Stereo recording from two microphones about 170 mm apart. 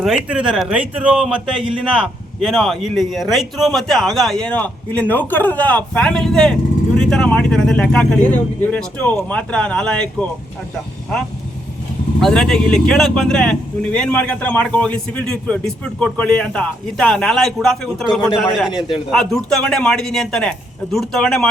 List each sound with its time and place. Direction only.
0.0 s speech: 5° right (ahead or behind)
12.2 s speech: 5° left (ahead or behind)
18.7 s a man's voice: 25° left (ahead or behind)
19.1 s speech: 5° left (ahead or behind)